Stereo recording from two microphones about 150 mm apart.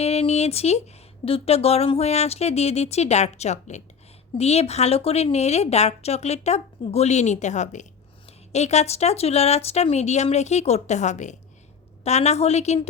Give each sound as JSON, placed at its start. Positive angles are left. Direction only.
{"t": 0.0, "sound": "speech", "side_deg": 45}